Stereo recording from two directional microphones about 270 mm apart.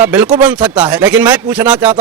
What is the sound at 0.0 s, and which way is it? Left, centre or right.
Speech, centre.